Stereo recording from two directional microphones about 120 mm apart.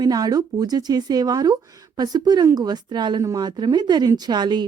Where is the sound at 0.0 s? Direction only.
35° right (ahead or behind).